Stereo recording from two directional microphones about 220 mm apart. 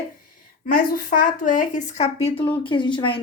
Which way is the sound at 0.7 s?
40° left (ahead or behind).